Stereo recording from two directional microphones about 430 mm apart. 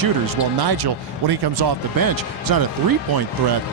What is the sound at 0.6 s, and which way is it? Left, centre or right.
Speech, right.